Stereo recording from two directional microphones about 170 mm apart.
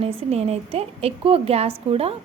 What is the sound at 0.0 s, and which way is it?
A woman's voice, 35° right (ahead or behind).